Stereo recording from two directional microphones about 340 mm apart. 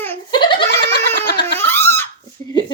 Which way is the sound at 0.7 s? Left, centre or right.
Left.